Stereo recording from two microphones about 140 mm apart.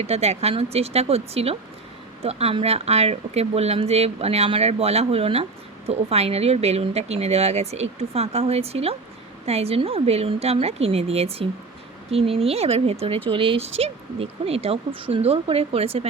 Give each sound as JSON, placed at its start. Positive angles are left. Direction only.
{"t": 0.0, "sound": "speech", "side_deg": -50}